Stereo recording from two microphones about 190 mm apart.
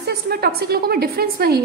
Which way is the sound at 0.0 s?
55° right (ahead or behind).